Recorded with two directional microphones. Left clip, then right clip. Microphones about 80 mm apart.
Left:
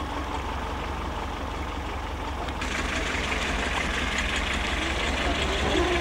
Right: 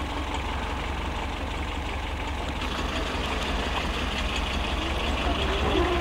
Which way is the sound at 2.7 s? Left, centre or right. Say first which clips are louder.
Left 3 dB; left.